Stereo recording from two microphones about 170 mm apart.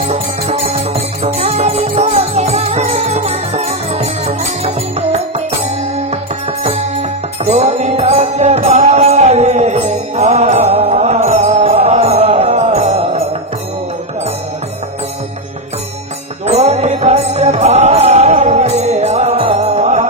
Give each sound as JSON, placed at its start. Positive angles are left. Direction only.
{"t": 0.0, "sound": "music", "side_deg": -35}
{"t": 6.6, "sound": "music", "side_deg": -40}
{"t": 16.4, "sound": "music", "side_deg": -40}